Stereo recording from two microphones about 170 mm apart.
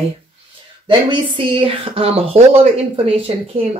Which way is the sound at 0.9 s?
30° right (ahead or behind).